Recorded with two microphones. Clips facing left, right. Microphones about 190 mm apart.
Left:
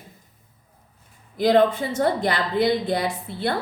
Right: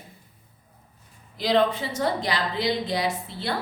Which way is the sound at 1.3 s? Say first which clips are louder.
Left 4 dB; 50° left (ahead or behind).